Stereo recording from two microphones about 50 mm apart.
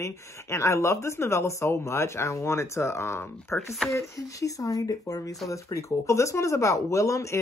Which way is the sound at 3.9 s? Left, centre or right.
Left.